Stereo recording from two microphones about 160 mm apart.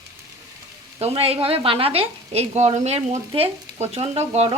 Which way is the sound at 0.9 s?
35° right (ahead or behind).